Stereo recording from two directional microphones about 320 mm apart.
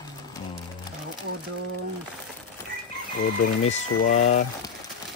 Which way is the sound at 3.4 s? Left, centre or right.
Left.